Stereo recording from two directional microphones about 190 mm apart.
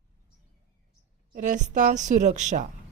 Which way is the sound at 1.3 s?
40° right (ahead or behind).